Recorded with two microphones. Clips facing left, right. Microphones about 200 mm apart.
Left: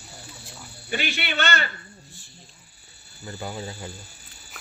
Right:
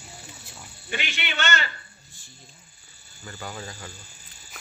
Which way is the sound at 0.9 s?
35° left (ahead or behind).